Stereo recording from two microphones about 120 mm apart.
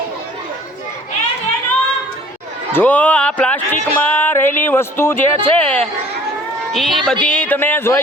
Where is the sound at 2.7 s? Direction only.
15° left (ahead or behind).